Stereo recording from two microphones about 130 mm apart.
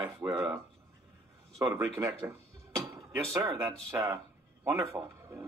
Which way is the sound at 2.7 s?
25° right (ahead or behind).